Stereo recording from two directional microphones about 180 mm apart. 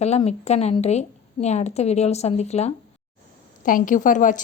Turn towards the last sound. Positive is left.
turn(degrees=45)  # may be behind; listen again after turning